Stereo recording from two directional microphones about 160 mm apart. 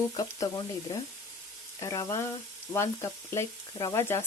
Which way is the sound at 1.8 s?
20° left (ahead or behind).